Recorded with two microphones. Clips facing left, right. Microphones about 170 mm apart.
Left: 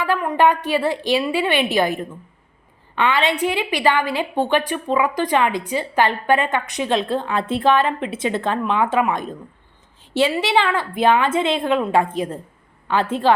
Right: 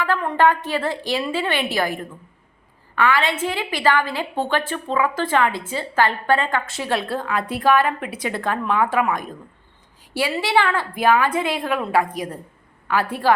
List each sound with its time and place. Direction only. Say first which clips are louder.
0.0 s a woman's voice: left 1 dB; 15° left (ahead or behind)